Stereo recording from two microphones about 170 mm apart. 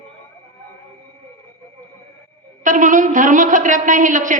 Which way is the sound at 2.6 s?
50° right (ahead or behind).